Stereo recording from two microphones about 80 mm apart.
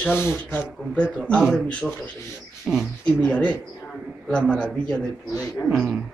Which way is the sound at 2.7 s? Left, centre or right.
Centre.